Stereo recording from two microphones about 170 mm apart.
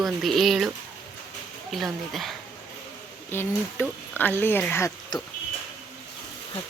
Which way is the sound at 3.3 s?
10° left (ahead or behind).